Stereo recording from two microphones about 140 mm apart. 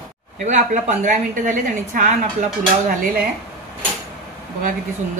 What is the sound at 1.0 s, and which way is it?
Speech, 65° right (ahead or behind).